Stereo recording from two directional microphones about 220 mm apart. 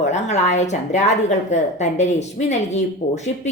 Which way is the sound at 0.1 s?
30° left (ahead or behind).